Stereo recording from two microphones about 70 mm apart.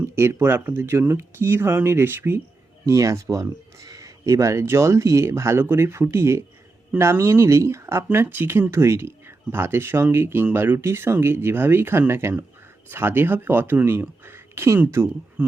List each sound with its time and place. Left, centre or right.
0.2 s speech: right
2.8 s speech: right
14.3 s a sound: right